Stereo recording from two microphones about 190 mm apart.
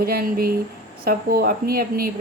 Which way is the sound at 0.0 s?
50° right (ahead or behind).